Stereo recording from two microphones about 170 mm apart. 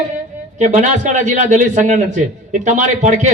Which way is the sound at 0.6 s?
45° right (ahead or behind).